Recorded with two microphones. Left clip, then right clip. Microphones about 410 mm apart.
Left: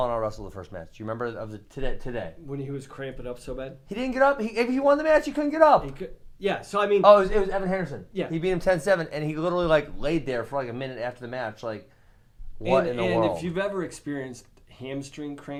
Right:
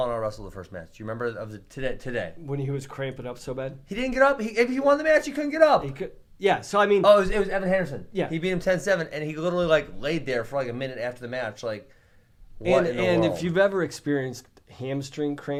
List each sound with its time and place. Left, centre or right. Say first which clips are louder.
0.0 s speech: left 1 dB; centre
2.5 s speech: right 3 dB; right
3.8 s speech: right 1 dB; centre
5.8 s speech: right 3 dB; right
7.0 s speech: left 6 dB; centre
12.6 s speech: right 1 dB; right